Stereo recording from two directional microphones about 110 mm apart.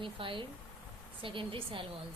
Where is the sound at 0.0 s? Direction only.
50° right (ahead or behind).